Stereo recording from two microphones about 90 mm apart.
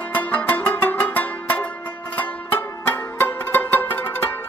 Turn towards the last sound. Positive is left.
turn(degrees=20)  # may be behind; listen again after turning